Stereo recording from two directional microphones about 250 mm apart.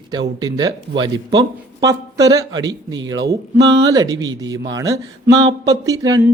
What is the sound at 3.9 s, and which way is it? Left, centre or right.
Speech, centre.